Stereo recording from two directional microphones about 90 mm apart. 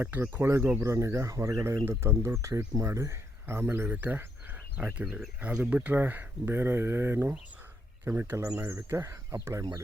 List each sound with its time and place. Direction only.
0.0 s speech: 20° right (ahead or behind)